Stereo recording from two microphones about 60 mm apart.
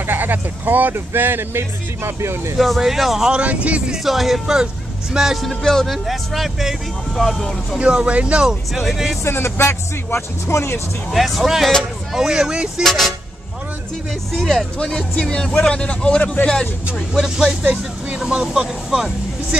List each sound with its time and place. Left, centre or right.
0.0 s speech: right
2.5 s speech: centre
3.3 s speech: centre
3.9 s speech: centre
5.5 s speech: centre
7.8 s speech: centre
9.2 s speech: left
11.1 s speech: centre
12.8 s speech: centre
14.3 s speech: centre
14.8 s a man's voice: centre
17.1 s speech: centre